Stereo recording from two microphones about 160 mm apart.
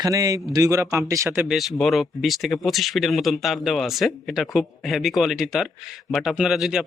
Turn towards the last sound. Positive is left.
turn(degrees=-5)  # may be behind; listen again after turning